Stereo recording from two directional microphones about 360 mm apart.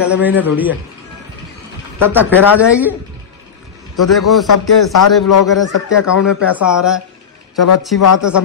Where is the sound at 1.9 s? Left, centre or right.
Centre.